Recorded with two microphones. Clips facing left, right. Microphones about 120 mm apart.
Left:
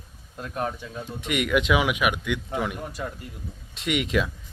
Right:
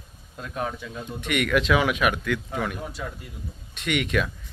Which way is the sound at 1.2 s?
25° left (ahead or behind).